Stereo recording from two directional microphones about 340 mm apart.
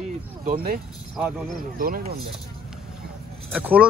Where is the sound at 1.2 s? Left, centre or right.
Centre.